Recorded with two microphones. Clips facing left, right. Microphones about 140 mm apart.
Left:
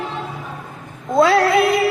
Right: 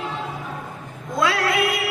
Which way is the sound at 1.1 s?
30° left (ahead or behind).